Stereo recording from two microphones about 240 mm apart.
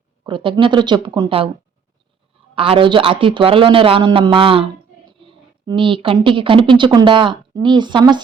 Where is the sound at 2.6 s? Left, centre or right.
Right.